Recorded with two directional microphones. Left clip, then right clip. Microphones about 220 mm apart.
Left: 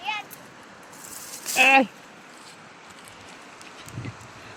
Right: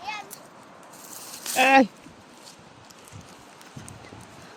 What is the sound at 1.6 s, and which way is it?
Speech, 35° right (ahead or behind).